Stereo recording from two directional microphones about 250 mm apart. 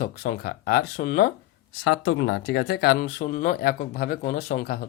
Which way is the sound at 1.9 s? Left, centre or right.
Left.